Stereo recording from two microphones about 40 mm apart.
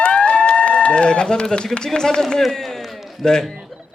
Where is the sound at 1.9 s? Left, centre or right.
Centre.